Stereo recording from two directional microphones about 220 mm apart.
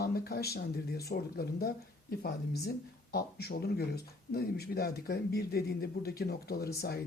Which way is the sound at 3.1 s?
45° left (ahead or behind).